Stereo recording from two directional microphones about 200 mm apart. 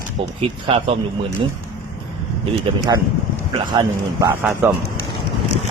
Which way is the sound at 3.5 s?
20° right (ahead or behind).